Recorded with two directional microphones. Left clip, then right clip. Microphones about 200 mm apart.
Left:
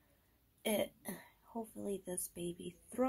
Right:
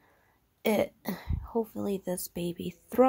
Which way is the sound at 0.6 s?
50° right (ahead or behind).